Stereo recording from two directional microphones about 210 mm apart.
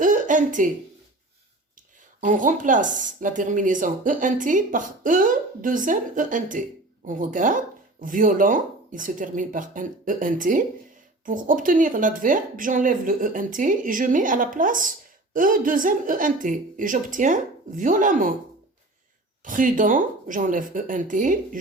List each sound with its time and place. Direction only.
0.0 s a sound: 40° right (ahead or behind)
2.2 s a woman's voice: 40° right (ahead or behind)
19.5 s a woman's voice: 40° right (ahead or behind)